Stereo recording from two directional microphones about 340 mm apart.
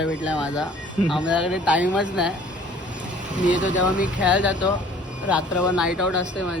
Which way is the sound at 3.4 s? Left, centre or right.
Left.